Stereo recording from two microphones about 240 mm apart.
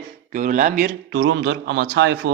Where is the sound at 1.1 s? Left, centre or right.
Right.